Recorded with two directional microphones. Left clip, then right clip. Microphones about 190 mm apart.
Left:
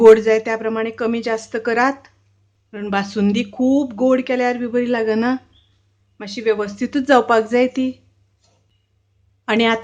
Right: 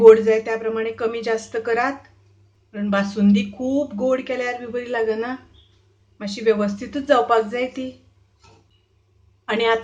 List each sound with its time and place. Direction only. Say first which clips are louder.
0.0 s speech: left 1 dB; 40° left (ahead or behind)
9.5 s speech: left 2 dB; 40° left (ahead or behind)